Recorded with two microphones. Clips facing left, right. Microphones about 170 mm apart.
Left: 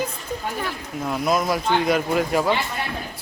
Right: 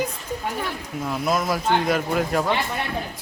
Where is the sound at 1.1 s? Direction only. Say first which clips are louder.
Left 2 dB; centre (ahead or behind).